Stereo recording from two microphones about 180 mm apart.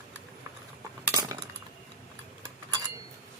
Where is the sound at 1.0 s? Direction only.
15° right (ahead or behind).